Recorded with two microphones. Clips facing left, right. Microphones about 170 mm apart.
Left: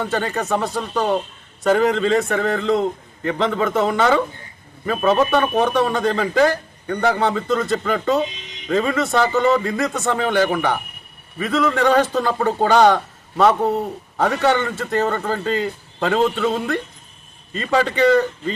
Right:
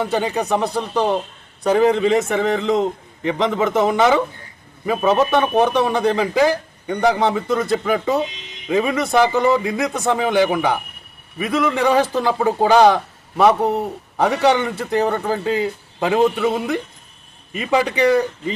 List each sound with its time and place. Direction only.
0.0 s a man's voice: 10° right (ahead or behind)